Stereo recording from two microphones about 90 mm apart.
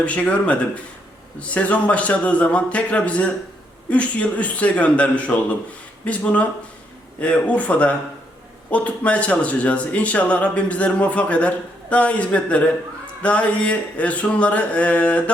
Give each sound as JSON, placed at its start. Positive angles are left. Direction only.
{"t": 0.0, "sound": "speech", "side_deg": 15}